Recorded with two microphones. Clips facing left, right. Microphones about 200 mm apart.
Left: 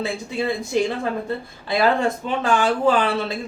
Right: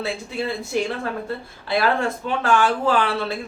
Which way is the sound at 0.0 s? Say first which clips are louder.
Left 2 dB; 15° left (ahead or behind).